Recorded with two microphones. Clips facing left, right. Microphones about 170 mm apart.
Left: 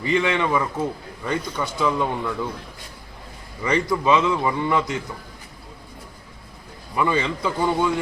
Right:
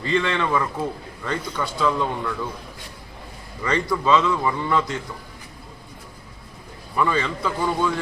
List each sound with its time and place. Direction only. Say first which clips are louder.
0.0 s a man's voice: left 1 dB; 10° left (ahead or behind)
3.6 s a man's voice: left 1 dB; 15° left (ahead or behind)
6.9 s a man's voice: left 1 dB; 15° left (ahead or behind)